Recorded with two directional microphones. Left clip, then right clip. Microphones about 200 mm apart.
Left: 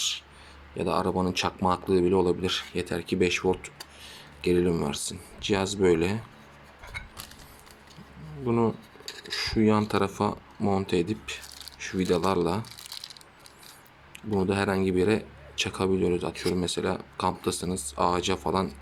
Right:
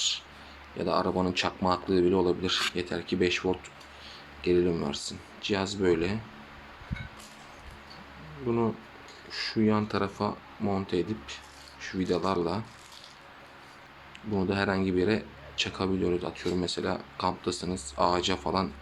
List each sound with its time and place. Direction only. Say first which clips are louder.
0.8 s a man's voice: left 1 dB; 35° left (ahead or behind)
8.4 s a man's voice: left 3 dB; 35° left (ahead or behind)
14.3 s a man's voice: left 2 dB; 35° left (ahead or behind)